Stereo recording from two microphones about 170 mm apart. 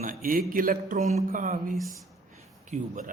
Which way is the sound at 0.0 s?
55° right (ahead or behind).